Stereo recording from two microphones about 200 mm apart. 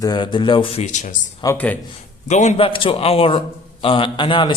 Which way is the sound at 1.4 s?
10° left (ahead or behind).